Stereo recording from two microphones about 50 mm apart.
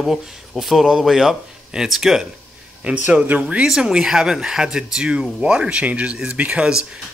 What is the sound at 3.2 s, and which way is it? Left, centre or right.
Speech, right.